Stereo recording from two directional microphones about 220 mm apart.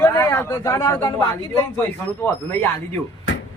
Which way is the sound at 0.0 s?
10° left (ahead or behind).